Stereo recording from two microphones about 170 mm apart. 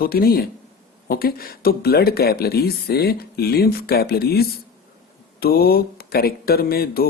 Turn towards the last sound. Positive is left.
turn(degrees=60)  # may be behind; listen again after turning